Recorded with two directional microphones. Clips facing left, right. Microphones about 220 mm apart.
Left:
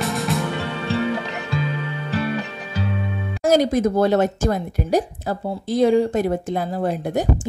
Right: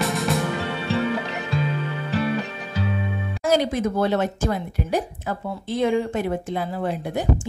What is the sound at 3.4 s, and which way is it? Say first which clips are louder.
A woman's voice: left 4 dB; 45° left (ahead or behind).